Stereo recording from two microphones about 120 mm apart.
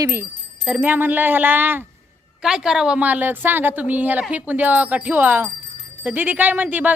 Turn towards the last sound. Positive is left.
turn(degrees=-15)  # may be behind; listen again after turning